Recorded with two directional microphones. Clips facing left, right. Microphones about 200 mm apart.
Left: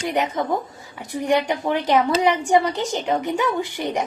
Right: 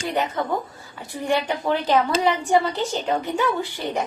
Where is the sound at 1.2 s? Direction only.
15° left (ahead or behind).